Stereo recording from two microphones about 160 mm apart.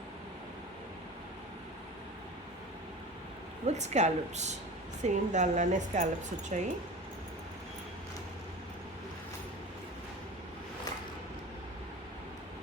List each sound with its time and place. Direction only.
3.7 s a woman's voice: 45° right (ahead or behind)